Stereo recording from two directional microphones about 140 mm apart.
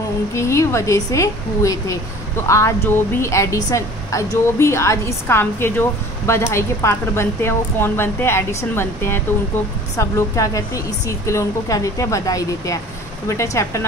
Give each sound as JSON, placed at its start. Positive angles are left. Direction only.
{"t": 0.3, "sound": "speech", "side_deg": 20}